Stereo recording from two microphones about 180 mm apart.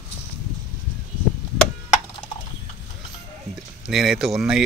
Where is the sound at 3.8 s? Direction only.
Centre (ahead or behind).